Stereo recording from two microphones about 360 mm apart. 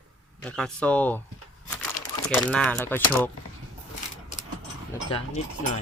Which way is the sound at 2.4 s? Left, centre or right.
Centre.